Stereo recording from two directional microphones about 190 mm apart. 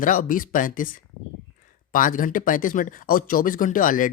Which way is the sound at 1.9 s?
45° left (ahead or behind).